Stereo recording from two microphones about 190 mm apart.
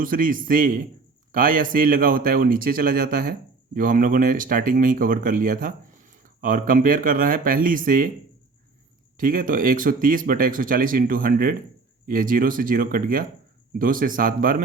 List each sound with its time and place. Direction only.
0.0 s speech: 45° right (ahead or behind)
9.1 s speech: 50° right (ahead or behind)